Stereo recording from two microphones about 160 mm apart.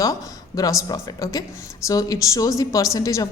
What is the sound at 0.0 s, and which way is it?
A woman's voice, 20° left (ahead or behind).